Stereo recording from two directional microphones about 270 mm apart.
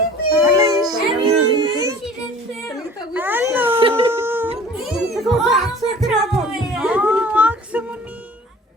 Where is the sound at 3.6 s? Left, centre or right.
Centre.